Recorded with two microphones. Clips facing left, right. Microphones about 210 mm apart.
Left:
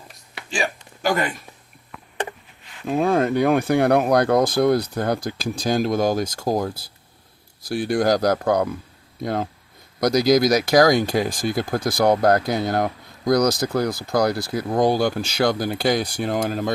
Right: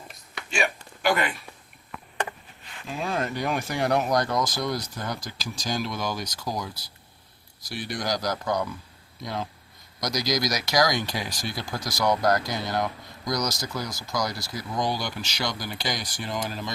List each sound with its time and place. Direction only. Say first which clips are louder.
1.0 s speech: left 3 dB; 45° left (ahead or behind)
2.8 s speech: left 10 dB; 55° left (ahead or behind)